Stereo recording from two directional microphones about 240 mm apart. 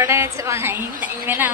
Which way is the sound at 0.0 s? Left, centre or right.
Centre.